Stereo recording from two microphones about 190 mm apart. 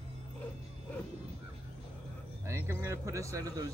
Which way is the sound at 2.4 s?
15° right (ahead or behind).